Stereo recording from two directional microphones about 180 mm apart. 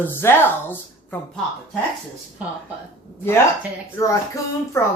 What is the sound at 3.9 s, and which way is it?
Speech, 15° left (ahead or behind).